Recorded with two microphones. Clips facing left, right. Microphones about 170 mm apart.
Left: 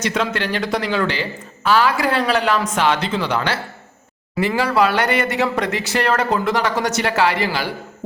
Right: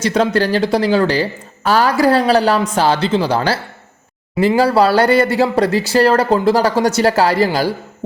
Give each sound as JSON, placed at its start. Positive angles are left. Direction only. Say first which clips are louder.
{"t": 0.0, "sound": "speech", "louder": "right 7 dB", "side_deg": -35}